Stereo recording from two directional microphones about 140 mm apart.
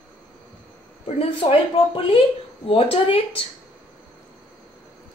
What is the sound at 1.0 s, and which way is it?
A woman's voice, 40° left (ahead or behind).